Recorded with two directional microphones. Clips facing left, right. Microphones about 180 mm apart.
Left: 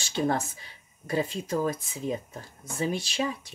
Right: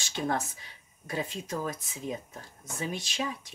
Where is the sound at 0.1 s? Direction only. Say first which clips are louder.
Left 4 dB; 35° left (ahead or behind).